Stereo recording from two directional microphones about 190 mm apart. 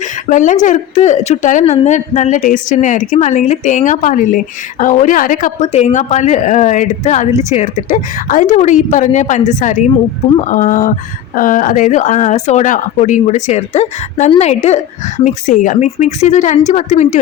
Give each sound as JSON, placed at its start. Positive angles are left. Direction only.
{"t": 0.3, "sound": "speech", "side_deg": 40}